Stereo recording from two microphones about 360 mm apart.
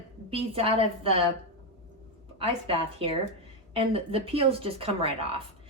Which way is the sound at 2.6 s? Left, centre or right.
Centre.